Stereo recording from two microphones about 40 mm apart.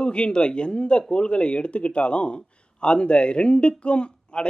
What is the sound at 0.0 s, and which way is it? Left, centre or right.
Speech, left.